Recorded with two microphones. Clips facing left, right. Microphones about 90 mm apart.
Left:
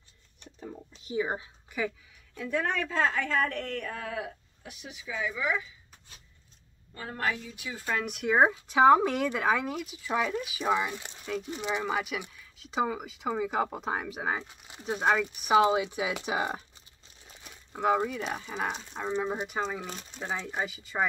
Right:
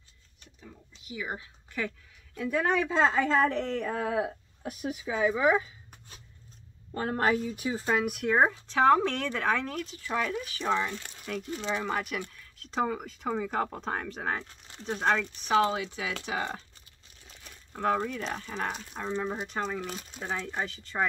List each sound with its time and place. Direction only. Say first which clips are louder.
0.6 s speech: left 8 dB; 40° left (ahead or behind); by 1.5 s 25° left (ahead or behind)
1.7 s speech: left 2 dB; 15° left (ahead or behind)
2.3 s a woman's voice: right 3 dB; 5° right (ahead or behind); by 4.4 s 30° right (ahead or behind)
4.6 s a woman's voice: right 8 dB; 45° right (ahead or behind)
8.0 s speech: left 3 dB; centre (ahead or behind)
11.1 s speech: left 3 dB; 5° left (ahead or behind)
11.5 s speech: even; 15° left (ahead or behind)